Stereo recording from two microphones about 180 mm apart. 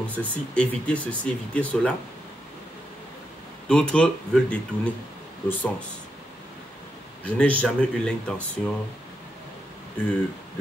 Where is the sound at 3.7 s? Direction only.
5° left (ahead or behind).